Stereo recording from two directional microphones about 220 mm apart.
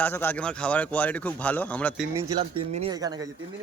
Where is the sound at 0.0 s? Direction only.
10° left (ahead or behind).